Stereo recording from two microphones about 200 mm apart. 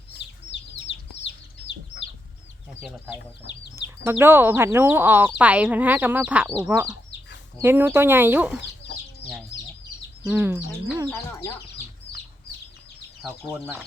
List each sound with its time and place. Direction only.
0.5 s chicken: 60° left (ahead or behind)
3.8 s speech: 15° right (ahead or behind)
8.5 s chicken: 60° left (ahead or behind)
10.2 s speech: 10° right (ahead or behind)
11.1 s speech: 15° left (ahead or behind)
12.1 s chicken: 30° left (ahead or behind)